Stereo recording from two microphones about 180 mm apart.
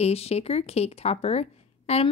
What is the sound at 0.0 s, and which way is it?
Speech, 35° left (ahead or behind).